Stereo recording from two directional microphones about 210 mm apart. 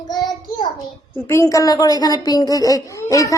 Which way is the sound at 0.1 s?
20° left (ahead or behind).